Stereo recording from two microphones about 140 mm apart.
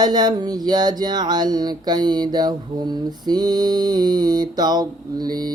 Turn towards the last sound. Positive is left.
turn(degrees=-30)  # may be behind; listen again after turning